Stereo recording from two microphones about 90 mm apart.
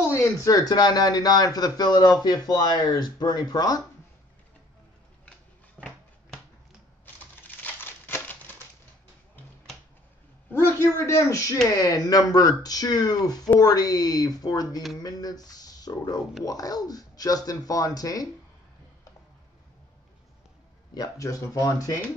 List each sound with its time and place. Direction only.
0.1 s speech: 35° left (ahead or behind)
5.8 s a sound: 5° left (ahead or behind)
7.4 s crumpling: 20° left (ahead or behind)
10.7 s speech: 30° left (ahead or behind)
20.9 s speech: 40° left (ahead or behind)